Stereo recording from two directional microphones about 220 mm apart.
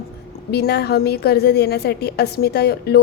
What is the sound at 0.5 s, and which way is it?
A woman's voice, 45° left (ahead or behind).